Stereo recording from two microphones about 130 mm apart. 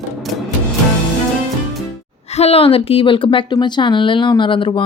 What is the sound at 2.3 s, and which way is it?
A woman's voice, 50° left (ahead or behind).